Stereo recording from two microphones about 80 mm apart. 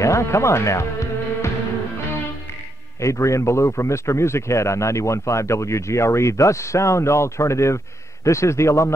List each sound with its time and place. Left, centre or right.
0.0 s speech: left
3.0 s a man's voice: left